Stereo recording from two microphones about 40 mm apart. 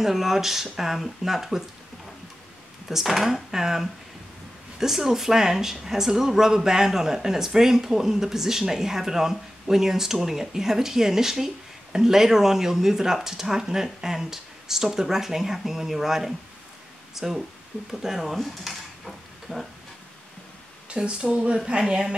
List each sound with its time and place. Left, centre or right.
0.0 s speech: centre
2.9 s speech: centre
20.9 s speech: right